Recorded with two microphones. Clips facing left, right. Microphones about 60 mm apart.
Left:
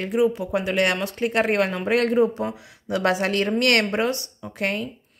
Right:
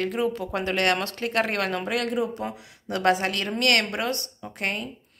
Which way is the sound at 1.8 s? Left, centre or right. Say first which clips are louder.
Left 7 dB; left.